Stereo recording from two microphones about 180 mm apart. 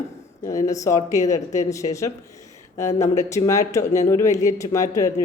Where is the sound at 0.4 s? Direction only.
20° left (ahead or behind).